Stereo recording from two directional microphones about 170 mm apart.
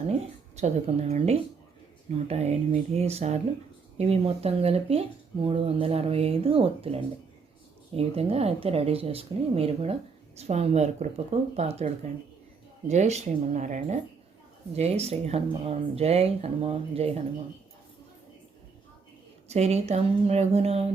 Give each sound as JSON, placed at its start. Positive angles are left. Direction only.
{"t": 0.1, "sound": "speech", "side_deg": -40}
{"t": 12.9, "sound": "speech", "side_deg": -40}
{"t": 19.5, "sound": "speech", "side_deg": -40}